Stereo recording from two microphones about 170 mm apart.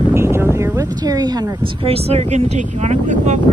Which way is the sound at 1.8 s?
35° right (ahead or behind).